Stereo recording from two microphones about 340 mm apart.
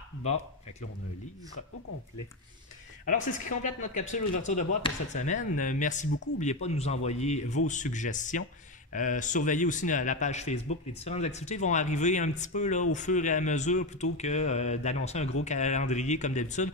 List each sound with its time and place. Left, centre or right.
0.2 s speech: centre
3.1 s speech: left